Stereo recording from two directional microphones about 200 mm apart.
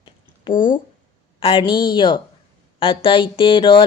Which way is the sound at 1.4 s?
25° left (ahead or behind).